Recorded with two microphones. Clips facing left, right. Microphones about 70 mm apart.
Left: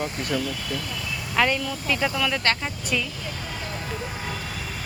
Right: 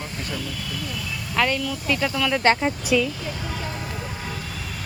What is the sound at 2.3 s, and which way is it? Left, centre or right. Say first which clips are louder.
Speech: right 6 dB; centre.